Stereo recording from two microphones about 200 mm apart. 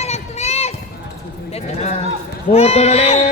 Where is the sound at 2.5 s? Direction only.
30° left (ahead or behind).